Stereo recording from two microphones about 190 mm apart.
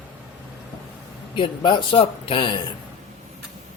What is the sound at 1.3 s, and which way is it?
Speech, 25° left (ahead or behind).